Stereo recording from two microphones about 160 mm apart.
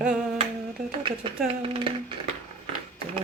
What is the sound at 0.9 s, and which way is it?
Speech, 30° right (ahead or behind).